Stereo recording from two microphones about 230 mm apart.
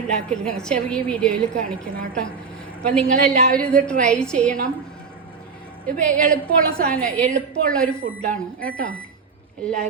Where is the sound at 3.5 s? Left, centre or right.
Centre.